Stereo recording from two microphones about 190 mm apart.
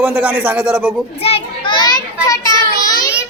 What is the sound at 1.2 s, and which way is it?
Speech, 30° left (ahead or behind).